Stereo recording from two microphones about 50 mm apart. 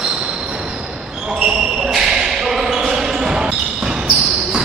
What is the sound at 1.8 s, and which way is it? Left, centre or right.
Basketball bounce, centre.